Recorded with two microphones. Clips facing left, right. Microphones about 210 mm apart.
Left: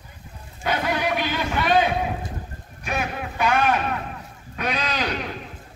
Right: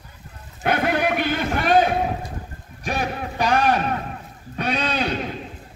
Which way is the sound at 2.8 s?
35° right (ahead or behind).